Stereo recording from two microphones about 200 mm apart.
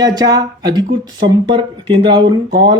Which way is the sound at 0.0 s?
20° right (ahead or behind).